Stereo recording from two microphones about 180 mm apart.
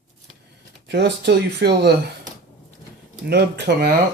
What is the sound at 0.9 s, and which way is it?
Speech, 65° right (ahead or behind).